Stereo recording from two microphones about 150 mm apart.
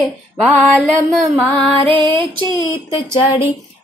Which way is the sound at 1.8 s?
35° right (ahead or behind).